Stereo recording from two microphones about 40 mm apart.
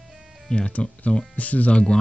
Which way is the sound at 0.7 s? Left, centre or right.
Left.